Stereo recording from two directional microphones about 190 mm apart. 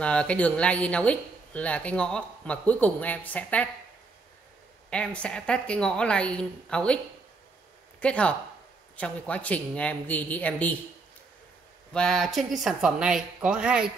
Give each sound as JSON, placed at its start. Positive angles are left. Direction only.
{"t": 0.0, "sound": "speech", "side_deg": 5}
{"t": 4.8, "sound": "a woman's voice", "side_deg": 5}
{"t": 8.0, "sound": "speech", "side_deg": 5}
{"t": 11.9, "sound": "a woman's voice", "side_deg": 5}